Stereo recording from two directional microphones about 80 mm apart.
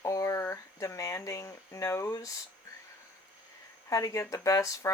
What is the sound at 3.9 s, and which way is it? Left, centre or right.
Speech, left.